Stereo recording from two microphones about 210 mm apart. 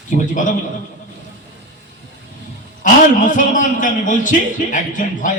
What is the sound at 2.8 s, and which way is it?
A man's voice, 40° left (ahead or behind).